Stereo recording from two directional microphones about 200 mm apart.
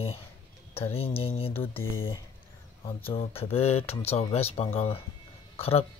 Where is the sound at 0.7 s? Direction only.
30° left (ahead or behind).